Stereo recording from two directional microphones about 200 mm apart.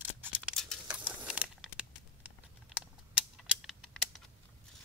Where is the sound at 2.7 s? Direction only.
5° right (ahead or behind).